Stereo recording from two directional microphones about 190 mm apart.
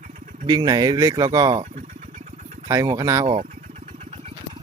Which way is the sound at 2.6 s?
20° right (ahead or behind).